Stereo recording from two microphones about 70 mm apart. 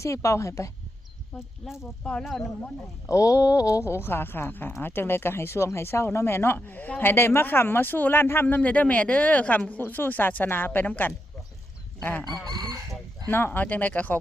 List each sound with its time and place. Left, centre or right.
0.0 s a woman's voice: left
1.6 s speech: centre
3.1 s speech: left
12.5 s chicken: right
13.3 s speech: left